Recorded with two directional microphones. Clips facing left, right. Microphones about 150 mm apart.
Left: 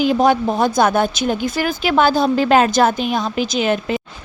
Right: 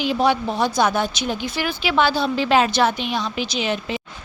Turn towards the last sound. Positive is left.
turn(degrees=50)  # may be behind; listen again after turning